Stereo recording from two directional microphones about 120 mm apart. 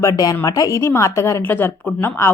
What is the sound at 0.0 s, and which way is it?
A woman's voice, 25° left (ahead or behind).